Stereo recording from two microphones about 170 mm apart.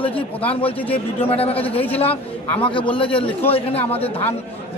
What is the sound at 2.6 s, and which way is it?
Speech, 30° left (ahead or behind).